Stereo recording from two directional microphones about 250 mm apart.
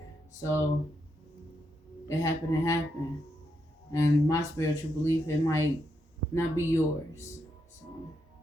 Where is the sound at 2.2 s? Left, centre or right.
Centre.